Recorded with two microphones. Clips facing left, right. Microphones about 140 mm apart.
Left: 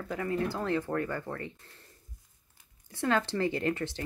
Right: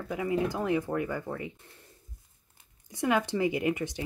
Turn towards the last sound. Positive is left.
turn(degrees=-15)  # may be behind; listen again after turning